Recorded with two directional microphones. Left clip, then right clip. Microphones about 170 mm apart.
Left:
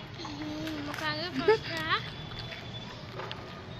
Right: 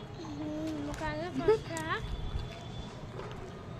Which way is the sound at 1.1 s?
50° right (ahead or behind).